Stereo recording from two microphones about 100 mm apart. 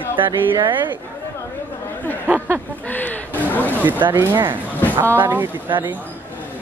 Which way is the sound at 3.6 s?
20° right (ahead or behind).